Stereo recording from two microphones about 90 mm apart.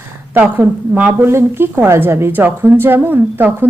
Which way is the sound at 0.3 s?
20° right (ahead or behind).